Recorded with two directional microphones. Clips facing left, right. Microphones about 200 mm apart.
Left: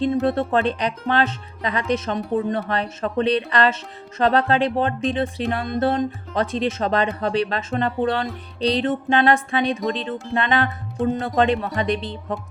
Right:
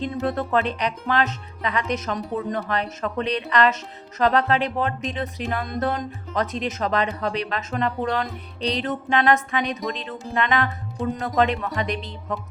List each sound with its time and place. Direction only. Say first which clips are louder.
0.0 s speech: left 5 dB; 30° left (ahead or behind)